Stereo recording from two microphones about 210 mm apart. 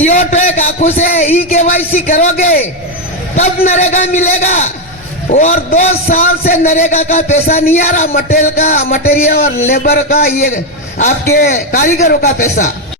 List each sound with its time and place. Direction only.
0.0 s a man's voice: 35° left (ahead or behind)